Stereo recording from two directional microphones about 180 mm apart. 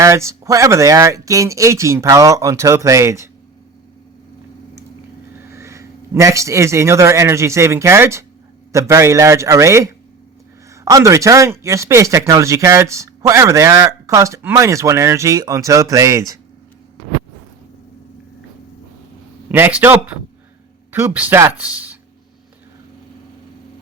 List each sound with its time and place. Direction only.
0.0 s speech: 15° right (ahead or behind)
5.4 s a man's voice: 15° right (ahead or behind)
19.5 s speech: 10° right (ahead or behind)
21.7 s a sound: 10° right (ahead or behind)